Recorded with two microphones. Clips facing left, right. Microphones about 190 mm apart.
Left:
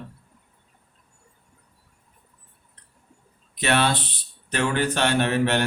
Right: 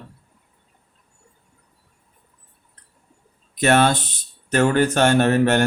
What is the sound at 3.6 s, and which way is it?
Speech, 45° right (ahead or behind).